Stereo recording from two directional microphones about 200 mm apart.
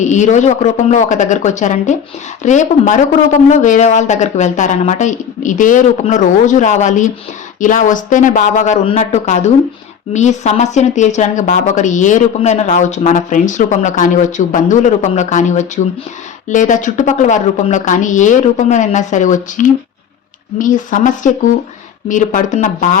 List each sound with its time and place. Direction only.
0.0 s speech: 35° left (ahead or behind)